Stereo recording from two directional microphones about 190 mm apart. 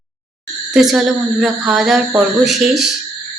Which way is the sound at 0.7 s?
Centre (ahead or behind).